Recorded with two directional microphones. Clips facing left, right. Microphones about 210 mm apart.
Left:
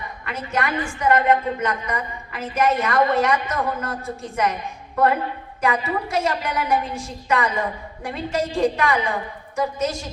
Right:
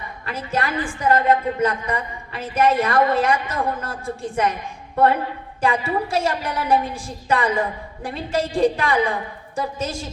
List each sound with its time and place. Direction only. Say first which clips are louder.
0.3 s a woman's voice: even; 30° right (ahead or behind)
5.5 s a woman's voice: right 2 dB; 30° right (ahead or behind)